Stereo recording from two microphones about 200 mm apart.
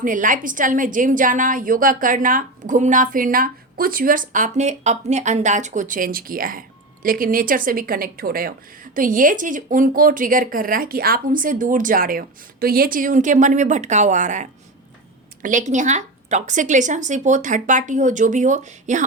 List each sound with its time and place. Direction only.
0.0 s a woman's voice: 40° right (ahead or behind)